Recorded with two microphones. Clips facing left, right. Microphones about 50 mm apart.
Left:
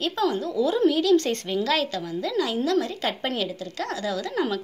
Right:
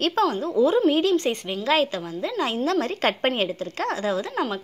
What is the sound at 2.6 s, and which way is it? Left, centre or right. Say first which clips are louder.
Speech: right 2 dB; right.